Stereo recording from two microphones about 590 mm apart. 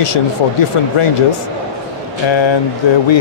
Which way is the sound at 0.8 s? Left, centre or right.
Left.